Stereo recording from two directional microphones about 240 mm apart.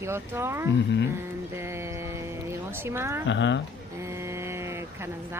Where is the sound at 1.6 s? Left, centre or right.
Centre.